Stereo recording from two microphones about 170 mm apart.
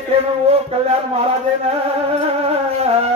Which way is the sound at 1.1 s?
35° right (ahead or behind).